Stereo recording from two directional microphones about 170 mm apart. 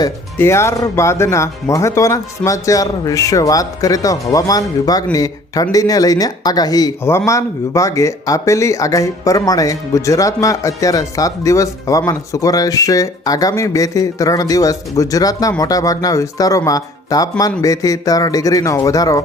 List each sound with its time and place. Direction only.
0.0 s speech: 15° left (ahead or behind)